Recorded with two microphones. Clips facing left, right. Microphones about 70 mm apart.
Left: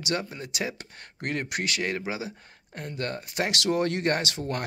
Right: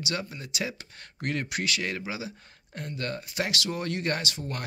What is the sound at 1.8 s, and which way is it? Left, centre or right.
Speech, left.